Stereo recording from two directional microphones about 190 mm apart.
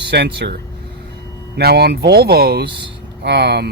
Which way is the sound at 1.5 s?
60° right (ahead or behind).